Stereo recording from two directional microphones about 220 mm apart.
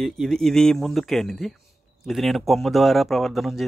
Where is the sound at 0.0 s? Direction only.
Centre (ahead or behind).